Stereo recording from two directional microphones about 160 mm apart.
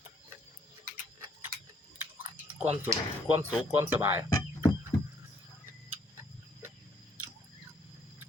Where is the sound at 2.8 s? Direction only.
15° right (ahead or behind).